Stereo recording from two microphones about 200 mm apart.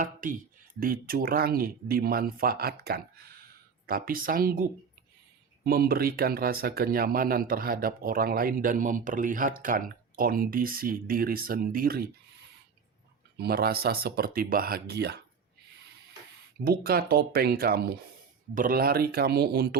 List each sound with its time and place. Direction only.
0.0 s speech: 40° right (ahead or behind)
5.6 s speech: 50° right (ahead or behind)
13.4 s speech: 50° right (ahead or behind)
16.6 s speech: 50° right (ahead or behind)